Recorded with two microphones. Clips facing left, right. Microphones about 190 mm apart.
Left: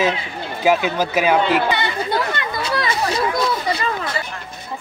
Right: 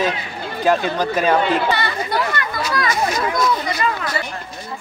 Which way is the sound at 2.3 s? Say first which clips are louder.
Even; 30° left (ahead or behind).